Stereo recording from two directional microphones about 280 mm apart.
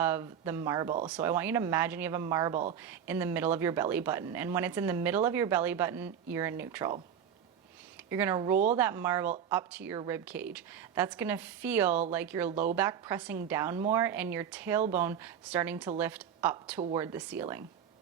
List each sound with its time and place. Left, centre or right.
0.0 s speech: centre
2.5 s speech: right
2.8 s speech: centre
8.1 s speech: centre